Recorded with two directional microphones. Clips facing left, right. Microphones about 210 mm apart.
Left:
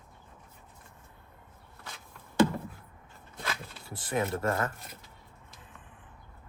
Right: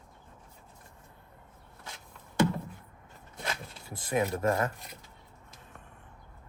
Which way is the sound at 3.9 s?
20° right (ahead or behind).